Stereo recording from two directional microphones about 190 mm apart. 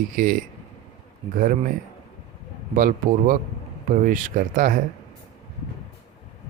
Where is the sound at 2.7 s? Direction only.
45° right (ahead or behind).